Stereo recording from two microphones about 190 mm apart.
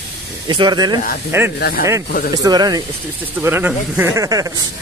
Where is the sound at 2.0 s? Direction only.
50° left (ahead or behind).